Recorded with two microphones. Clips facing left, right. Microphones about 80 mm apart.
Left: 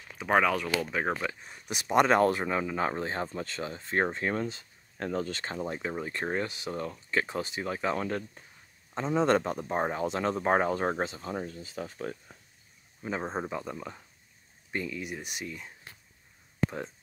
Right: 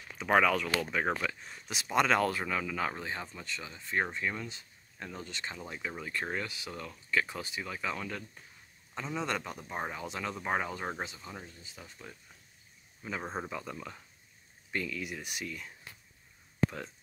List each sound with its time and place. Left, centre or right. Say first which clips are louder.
0.2 s speech: left 1 dB; centre
2.0 s speech: left 5 dB; left
4.9 s speech: left 11 dB; left
5.3 s speech: left 7 dB; left
11.4 s speech: left 11 dB; left
11.7 s speech: left 14 dB; left
13.0 s speech: left 5 dB; left